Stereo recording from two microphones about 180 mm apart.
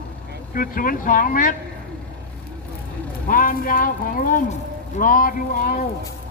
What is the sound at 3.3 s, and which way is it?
Speech, 50° left (ahead or behind).